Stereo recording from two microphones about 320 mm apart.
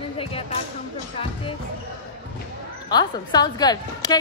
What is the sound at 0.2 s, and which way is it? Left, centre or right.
Basketball bounce, centre.